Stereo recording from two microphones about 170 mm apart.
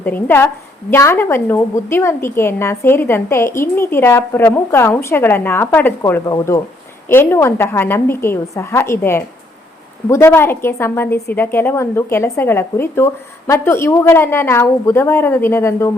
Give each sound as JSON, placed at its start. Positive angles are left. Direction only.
{"t": 0.0, "sound": "a woman's voice", "side_deg": 10}